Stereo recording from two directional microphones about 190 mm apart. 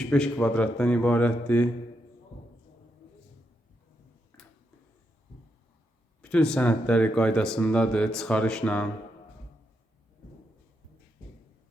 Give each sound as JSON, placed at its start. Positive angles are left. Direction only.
{"t": 0.0, "sound": "a man's voice", "side_deg": 5}
{"t": 4.3, "sound": "a sound", "side_deg": 10}
{"t": 6.2, "sound": "speech", "side_deg": 5}